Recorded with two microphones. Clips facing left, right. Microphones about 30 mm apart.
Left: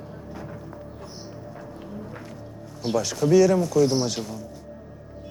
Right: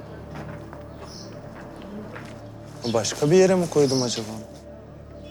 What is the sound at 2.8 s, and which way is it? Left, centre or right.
Speech, centre.